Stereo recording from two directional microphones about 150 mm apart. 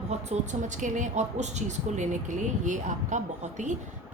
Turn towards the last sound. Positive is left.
turn(degrees=-55)  # may be behind; listen again after turning